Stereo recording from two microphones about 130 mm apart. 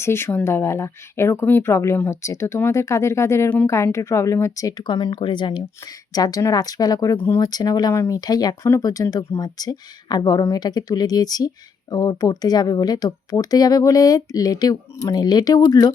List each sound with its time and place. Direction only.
0.0 s speech: 20° left (ahead or behind)